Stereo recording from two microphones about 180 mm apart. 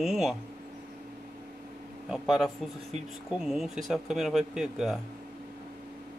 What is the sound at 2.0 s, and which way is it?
Speech, centre (ahead or behind).